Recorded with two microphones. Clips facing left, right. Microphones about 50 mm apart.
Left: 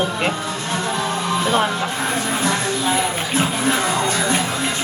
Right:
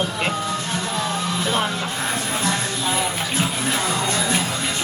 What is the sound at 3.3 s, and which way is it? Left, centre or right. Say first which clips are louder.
Music: left 5 dB; left.